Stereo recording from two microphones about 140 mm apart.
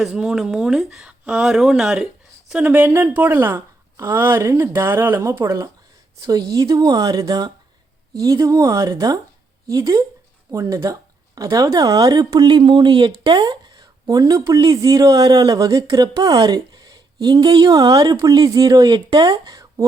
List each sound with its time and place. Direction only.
0.0 s a woman's voice: centre (ahead or behind); by 19.8 s 25° right (ahead or behind)